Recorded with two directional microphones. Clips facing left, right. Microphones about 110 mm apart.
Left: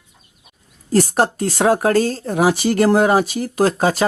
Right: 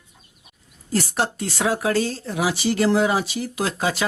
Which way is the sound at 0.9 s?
45° left (ahead or behind).